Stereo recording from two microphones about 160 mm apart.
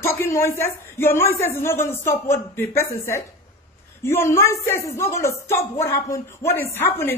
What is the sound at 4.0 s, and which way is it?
Speech, 15° left (ahead or behind).